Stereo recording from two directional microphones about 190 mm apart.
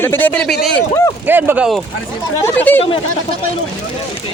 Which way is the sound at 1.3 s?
10° right (ahead or behind).